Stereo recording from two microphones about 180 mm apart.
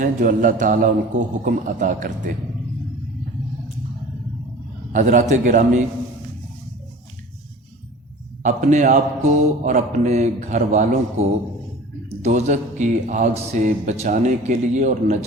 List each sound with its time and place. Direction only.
0.0 s a man's voice: 50° right (ahead or behind)
4.9 s a man's voice: 45° right (ahead or behind)
8.4 s a man's voice: 45° right (ahead or behind)